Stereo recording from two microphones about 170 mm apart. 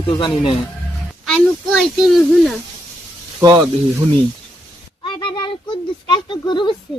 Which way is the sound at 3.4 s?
20° right (ahead or behind).